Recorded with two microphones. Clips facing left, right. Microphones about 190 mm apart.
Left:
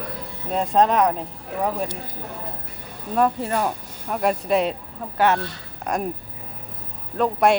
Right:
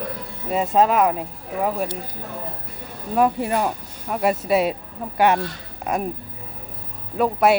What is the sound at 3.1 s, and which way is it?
Speech, 10° right (ahead or behind).